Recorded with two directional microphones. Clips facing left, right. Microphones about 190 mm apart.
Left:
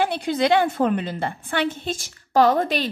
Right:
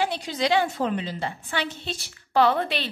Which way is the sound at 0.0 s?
55° left (ahead or behind).